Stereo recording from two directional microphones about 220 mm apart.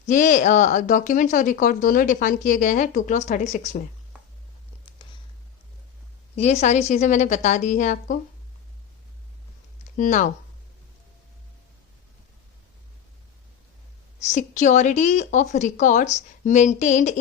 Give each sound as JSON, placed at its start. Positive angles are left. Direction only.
{"t": 0.0, "sound": "speech", "side_deg": 35}
{"t": 6.3, "sound": "speech", "side_deg": 30}
{"t": 10.0, "sound": "speech", "side_deg": 35}
{"t": 14.2, "sound": "speech", "side_deg": 30}